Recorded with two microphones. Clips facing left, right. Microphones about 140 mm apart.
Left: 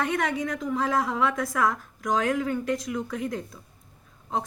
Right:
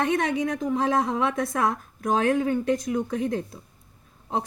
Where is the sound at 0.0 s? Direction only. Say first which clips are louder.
Right 3 dB; 25° right (ahead or behind).